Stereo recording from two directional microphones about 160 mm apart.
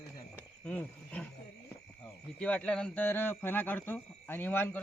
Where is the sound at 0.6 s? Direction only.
10° left (ahead or behind).